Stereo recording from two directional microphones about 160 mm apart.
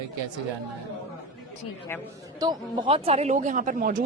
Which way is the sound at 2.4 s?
25° right (ahead or behind).